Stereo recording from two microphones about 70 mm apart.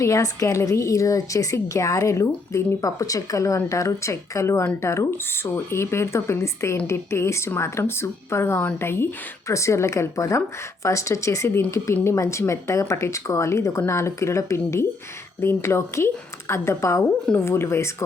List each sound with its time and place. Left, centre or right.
0.0 s speech: left